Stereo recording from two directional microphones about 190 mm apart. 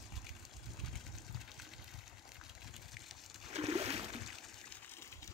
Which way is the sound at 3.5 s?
35° right (ahead or behind).